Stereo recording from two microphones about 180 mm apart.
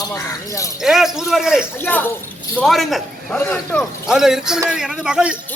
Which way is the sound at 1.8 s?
10° left (ahead or behind).